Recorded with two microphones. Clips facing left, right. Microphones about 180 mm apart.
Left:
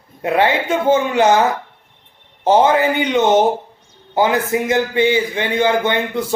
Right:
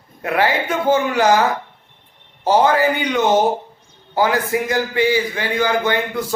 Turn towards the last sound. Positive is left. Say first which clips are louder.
# left 1 dB
turn(degrees=25)  # may be behind; listen again after turning